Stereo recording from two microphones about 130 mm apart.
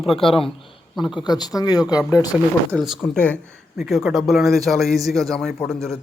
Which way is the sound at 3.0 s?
10° left (ahead or behind).